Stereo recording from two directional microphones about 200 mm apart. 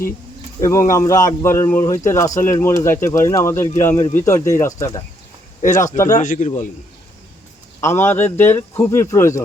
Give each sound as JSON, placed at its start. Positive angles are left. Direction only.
{"t": 0.6, "sound": "a man's voice", "side_deg": 15}
{"t": 6.1, "sound": "a man's voice", "side_deg": 40}
{"t": 7.8, "sound": "a man's voice", "side_deg": 10}